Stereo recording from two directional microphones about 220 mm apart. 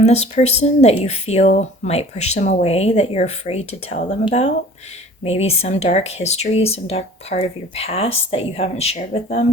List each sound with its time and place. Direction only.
0.0 s speech: 30° left (ahead or behind)